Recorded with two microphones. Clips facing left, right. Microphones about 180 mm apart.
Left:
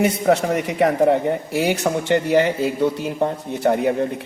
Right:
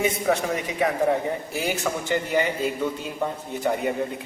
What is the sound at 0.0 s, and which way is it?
A woman's voice, 65° left (ahead or behind).